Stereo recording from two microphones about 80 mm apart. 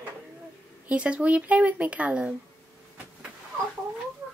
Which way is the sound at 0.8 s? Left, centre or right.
Centre.